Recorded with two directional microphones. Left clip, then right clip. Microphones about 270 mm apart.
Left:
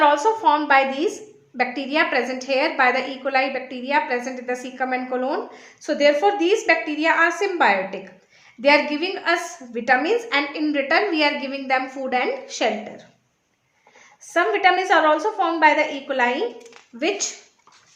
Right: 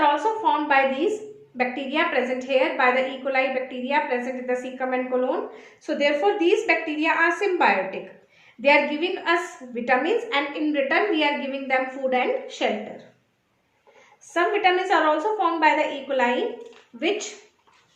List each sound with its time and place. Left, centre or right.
0.0 s a woman's voice: left
14.3 s a woman's voice: left